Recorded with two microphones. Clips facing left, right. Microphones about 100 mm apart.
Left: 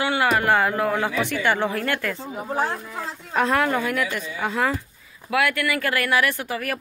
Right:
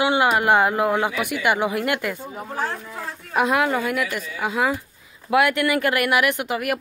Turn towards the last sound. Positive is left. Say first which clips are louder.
# right 4 dB
turn(degrees=-15)  # may be behind; listen again after turning